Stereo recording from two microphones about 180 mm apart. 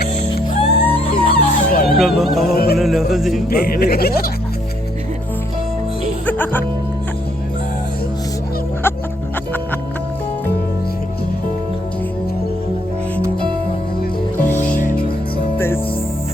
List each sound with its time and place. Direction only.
0.6 s music: 30° left (ahead or behind)
1.1 s music: 55° left (ahead or behind)
2.0 s speech: centre (ahead or behind)
2.5 s speech: 60° left (ahead or behind)
2.7 s speech: centre (ahead or behind)
3.5 s speech: 60° left (ahead or behind)
6.2 s music: 10° left (ahead or behind)
14.3 s music: 10° left (ahead or behind)
14.8 s music: 50° left (ahead or behind)
15.5 s music: 15° left (ahead or behind)